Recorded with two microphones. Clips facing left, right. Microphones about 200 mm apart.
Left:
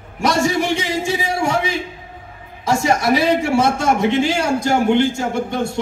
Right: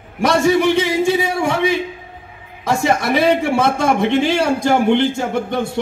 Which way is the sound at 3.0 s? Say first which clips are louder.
Right 1 dB; 55° right (ahead or behind).